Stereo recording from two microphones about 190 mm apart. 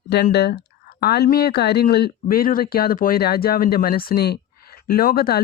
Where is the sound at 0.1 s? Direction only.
60° left (ahead or behind).